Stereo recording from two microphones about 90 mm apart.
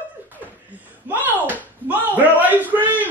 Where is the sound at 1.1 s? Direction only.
20° right (ahead or behind).